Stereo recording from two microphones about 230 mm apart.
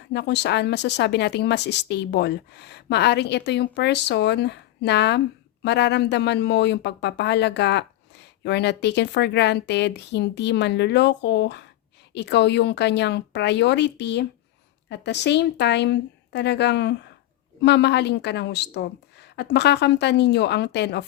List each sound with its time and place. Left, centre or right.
0.0 s speech: left